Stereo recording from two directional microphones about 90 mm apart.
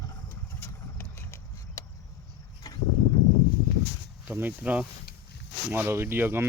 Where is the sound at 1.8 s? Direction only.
35° left (ahead or behind).